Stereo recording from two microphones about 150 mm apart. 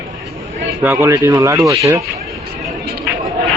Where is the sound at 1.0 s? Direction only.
20° right (ahead or behind).